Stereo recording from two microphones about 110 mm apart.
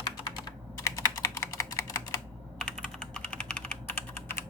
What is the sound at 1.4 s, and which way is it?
Typing, 25° left (ahead or behind).